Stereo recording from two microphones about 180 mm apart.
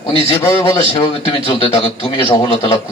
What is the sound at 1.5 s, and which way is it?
A man's voice, 30° left (ahead or behind).